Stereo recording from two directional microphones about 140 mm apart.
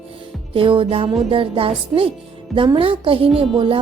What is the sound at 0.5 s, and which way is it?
Music, 40° right (ahead or behind).